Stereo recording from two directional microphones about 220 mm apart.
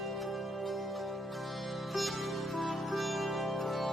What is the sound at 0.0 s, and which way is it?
Music, centre (ahead or behind).